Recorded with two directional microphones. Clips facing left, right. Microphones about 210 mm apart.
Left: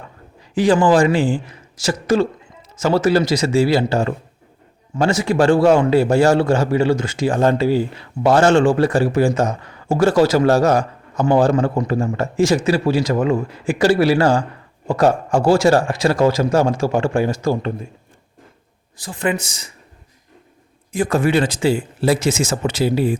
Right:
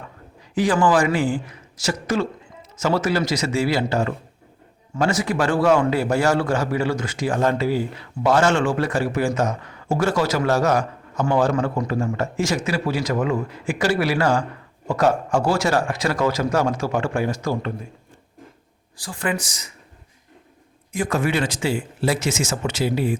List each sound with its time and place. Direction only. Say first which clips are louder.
0.5 s a man's voice: left 4 dB; 30° left (ahead or behind)
18.9 s a man's voice: left 4 dB; 20° left (ahead or behind)
20.9 s a man's voice: left 5 dB; 35° left (ahead or behind)